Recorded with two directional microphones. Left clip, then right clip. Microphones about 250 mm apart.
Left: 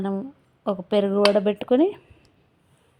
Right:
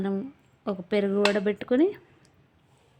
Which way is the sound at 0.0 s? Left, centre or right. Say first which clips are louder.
Left 2 dB; centre.